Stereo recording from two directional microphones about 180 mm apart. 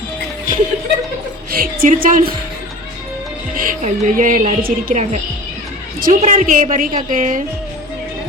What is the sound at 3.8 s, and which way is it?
A woman's voice, 45° right (ahead or behind).